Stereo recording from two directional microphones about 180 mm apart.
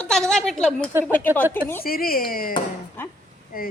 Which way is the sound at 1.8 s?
55° left (ahead or behind).